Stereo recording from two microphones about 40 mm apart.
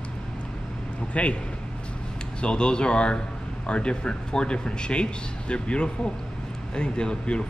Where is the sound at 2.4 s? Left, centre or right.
Left.